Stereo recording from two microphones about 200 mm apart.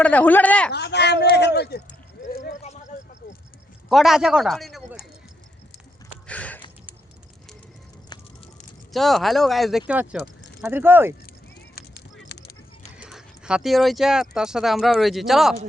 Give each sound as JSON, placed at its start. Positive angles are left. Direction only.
{"t": 0.0, "sound": "speech", "side_deg": 5}
{"t": 0.7, "sound": "speech", "side_deg": 55}
{"t": 1.9, "sound": "a sound", "side_deg": 40}
{"t": 3.8, "sound": "speech", "side_deg": 0}
{"t": 6.2, "sound": "a sound", "side_deg": 5}
{"t": 8.9, "sound": "speech", "side_deg": 0}
{"t": 11.7, "sound": "vehicle", "side_deg": 50}
{"t": 13.0, "sound": "speech", "side_deg": -5}